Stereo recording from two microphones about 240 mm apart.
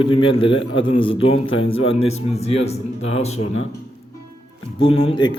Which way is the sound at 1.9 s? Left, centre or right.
Left.